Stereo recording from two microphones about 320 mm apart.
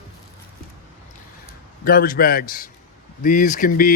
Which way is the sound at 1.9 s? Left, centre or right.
Left.